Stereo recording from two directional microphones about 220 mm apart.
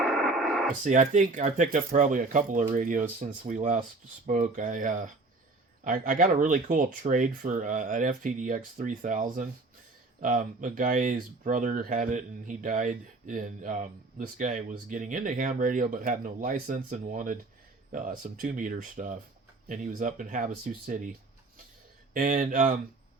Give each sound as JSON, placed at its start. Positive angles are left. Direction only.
{"t": 0.0, "sound": "radio", "side_deg": 0}
{"t": 0.9, "sound": "speech", "side_deg": -35}